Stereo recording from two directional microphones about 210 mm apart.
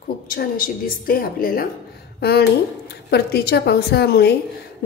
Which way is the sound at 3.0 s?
50° left (ahead or behind).